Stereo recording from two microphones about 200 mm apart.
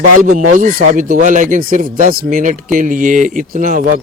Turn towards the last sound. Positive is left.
turn(degrees=-40)  # may be behind; listen again after turning